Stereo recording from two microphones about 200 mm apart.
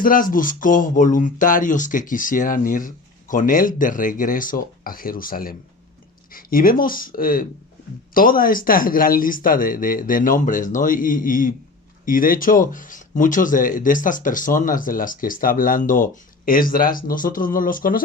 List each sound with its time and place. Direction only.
0.0 s speech: 45° left (ahead or behind)